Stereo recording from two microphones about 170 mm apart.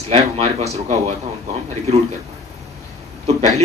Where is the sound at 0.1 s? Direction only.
40° right (ahead or behind).